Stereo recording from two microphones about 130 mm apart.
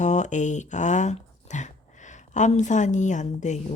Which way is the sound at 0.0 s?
65° left (ahead or behind).